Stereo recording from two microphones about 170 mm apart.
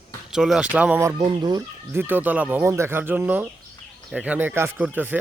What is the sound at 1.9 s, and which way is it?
Speech, 10° right (ahead or behind).